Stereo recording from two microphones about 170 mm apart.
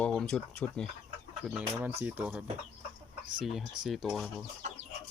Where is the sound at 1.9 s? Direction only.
10° right (ahead or behind).